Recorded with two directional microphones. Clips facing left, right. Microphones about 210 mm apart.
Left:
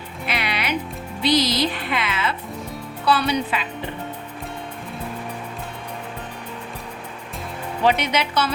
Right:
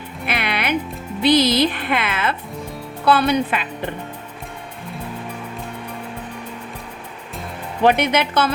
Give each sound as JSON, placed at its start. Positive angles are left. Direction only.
{"t": 0.3, "sound": "music", "side_deg": -55}
{"t": 1.2, "sound": "speech", "side_deg": -55}
{"t": 7.9, "sound": "speech", "side_deg": -55}